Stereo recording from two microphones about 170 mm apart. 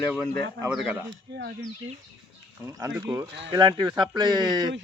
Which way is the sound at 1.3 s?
90° right.